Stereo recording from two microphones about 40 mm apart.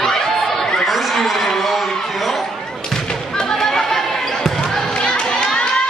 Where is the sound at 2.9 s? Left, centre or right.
Centre.